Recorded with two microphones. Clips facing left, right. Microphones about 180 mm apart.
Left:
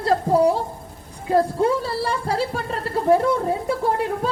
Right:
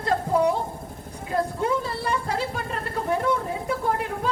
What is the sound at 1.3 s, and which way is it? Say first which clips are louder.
Speech: left 6 dB; 35° left (ahead or behind).